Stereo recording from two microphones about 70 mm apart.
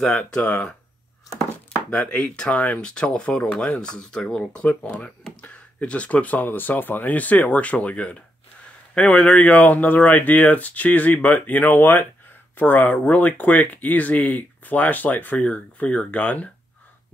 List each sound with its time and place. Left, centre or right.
0.3 s speech: centre
1.9 s speech: centre